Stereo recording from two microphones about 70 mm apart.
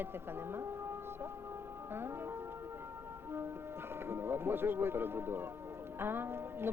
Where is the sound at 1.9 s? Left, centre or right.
Right.